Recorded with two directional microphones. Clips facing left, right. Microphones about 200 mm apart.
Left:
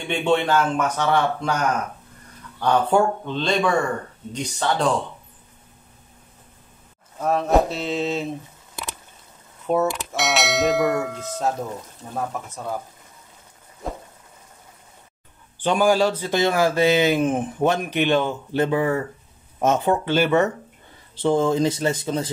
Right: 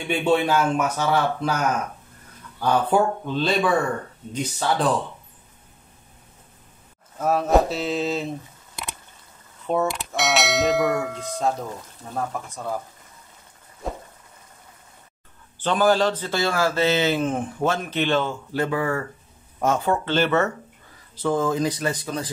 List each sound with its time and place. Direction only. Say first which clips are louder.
0.1 s a man's voice: even; 5° right (ahead or behind)
2.6 s creak: left 1 dB; 5° right (ahead or behind)
7.2 s creak: even; 5° right (ahead or behind)
9.7 s creak: left 2 dB; centre (ahead or behind)
12.0 s speech: even; 5° left (ahead or behind)
13.8 s a sound: even; centre (ahead or behind)
15.6 s speech: left 1 dB; 10° left (ahead or behind)
21.1 s speech: left 3 dB; 25° left (ahead or behind)